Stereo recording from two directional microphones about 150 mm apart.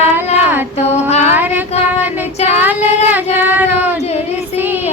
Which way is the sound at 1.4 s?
10° right (ahead or behind).